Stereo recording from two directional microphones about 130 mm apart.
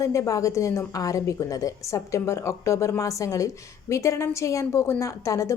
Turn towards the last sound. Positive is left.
turn(degrees=25)  # may be behind; listen again after turning